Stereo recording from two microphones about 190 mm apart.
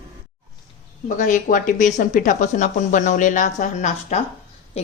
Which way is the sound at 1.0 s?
40° left (ahead or behind).